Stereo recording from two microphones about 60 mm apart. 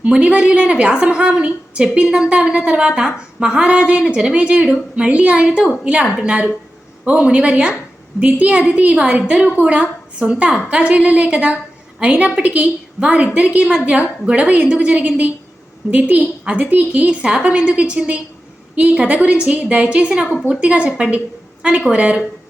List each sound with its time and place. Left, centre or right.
0.0 s a woman's voice: centre